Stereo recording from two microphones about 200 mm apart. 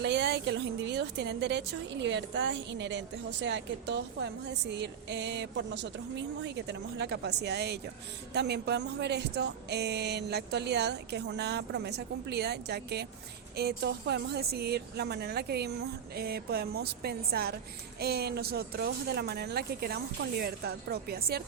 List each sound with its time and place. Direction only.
0.0 s a woman's voice: 60° right (ahead or behind)